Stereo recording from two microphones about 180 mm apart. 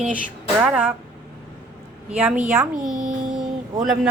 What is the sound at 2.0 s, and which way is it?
A man's voice, 5° right (ahead or behind).